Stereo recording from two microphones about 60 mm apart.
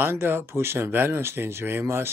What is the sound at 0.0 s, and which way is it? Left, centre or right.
Speech, right.